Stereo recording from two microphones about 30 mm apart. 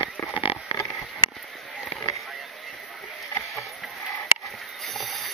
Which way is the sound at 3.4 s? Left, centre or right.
Centre.